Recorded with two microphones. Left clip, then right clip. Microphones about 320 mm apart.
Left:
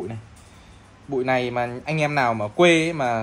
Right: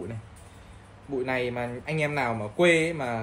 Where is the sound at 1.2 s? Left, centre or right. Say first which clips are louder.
Left 7 dB; left.